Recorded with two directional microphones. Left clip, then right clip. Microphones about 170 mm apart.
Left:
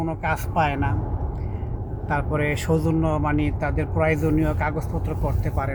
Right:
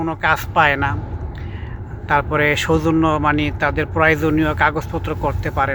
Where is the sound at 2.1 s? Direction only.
25° right (ahead or behind).